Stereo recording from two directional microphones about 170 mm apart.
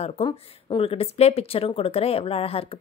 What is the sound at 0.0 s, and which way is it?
Speech, 30° left (ahead or behind).